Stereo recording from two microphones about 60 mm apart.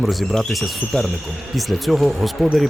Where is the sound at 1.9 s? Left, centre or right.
Centre.